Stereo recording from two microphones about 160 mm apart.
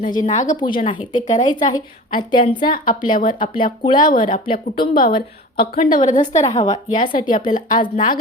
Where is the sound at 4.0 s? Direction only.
55° left (ahead or behind).